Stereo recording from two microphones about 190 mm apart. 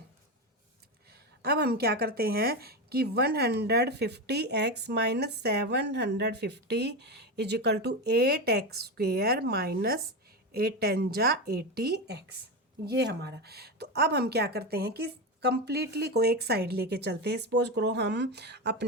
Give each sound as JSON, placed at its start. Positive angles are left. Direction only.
{"t": 1.5, "sound": "speech", "side_deg": -55}